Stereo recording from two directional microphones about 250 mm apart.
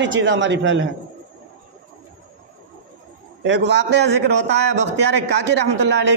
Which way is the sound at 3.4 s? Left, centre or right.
Right.